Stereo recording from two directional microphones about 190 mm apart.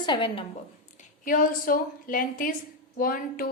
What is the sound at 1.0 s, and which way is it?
A woman's voice, 45° left (ahead or behind).